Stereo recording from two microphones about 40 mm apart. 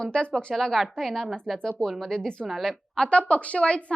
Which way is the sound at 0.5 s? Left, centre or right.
Centre.